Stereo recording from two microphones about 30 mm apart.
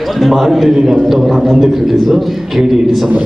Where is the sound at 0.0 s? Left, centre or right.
Centre.